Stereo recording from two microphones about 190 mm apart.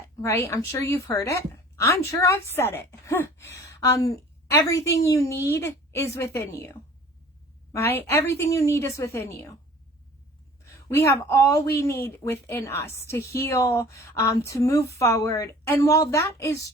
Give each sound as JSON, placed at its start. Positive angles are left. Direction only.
{"t": 0.2, "sound": "a woman's voice", "side_deg": 15}
{"t": 7.7, "sound": "a woman's voice", "side_deg": 15}
{"t": 10.8, "sound": "a woman's voice", "side_deg": 15}